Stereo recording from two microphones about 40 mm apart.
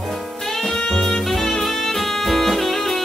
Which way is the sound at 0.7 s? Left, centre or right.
Centre.